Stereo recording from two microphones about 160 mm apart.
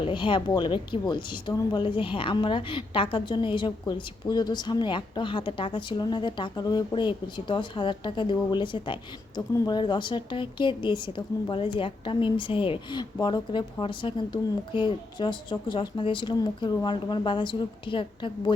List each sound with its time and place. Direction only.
0.0 s speech: 30° left (ahead or behind)